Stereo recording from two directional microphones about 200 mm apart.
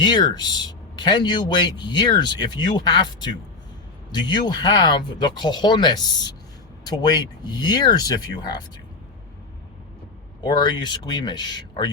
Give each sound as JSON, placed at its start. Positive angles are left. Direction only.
{"t": 0.0, "sound": "speech", "side_deg": 20}
{"t": 10.4, "sound": "speech", "side_deg": 20}